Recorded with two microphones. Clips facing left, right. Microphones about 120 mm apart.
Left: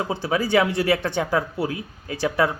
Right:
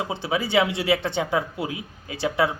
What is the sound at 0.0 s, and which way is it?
A man's voice, 20° right (ahead or behind).